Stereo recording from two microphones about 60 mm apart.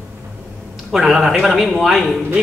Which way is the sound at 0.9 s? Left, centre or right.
Centre.